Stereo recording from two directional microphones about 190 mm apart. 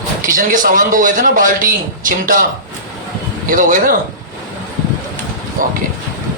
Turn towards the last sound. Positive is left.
turn(degrees=-45)  # may be behind; listen again after turning